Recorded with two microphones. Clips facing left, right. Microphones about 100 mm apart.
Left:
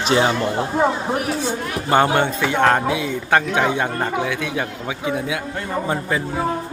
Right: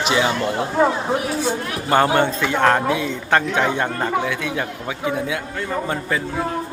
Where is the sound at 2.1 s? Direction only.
15° left (ahead or behind).